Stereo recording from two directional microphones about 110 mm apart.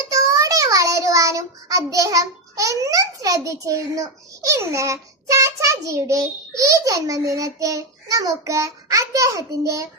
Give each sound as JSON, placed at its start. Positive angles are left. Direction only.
{"t": 0.1, "sound": "a child's voice", "side_deg": -30}